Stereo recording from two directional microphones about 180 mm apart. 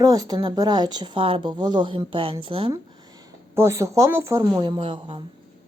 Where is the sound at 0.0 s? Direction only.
20° right (ahead or behind).